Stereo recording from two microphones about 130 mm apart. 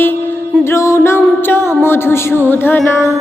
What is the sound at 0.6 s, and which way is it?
Music, 20° left (ahead or behind).